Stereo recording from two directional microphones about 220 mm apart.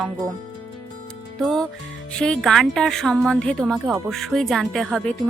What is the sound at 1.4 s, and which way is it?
Speech, centre (ahead or behind).